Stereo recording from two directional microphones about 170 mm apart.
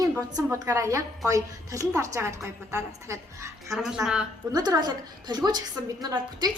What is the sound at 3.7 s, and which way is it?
Speech, centre (ahead or behind).